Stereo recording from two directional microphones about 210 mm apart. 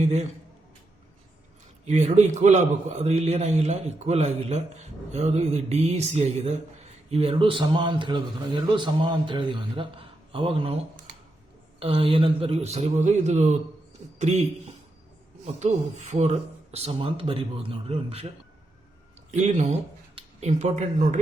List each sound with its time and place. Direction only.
0.0 s a man's voice: 30° right (ahead or behind)
1.8 s a man's voice: 30° right (ahead or behind)
15.5 s speech: 35° right (ahead or behind)
19.3 s a man's voice: 35° right (ahead or behind)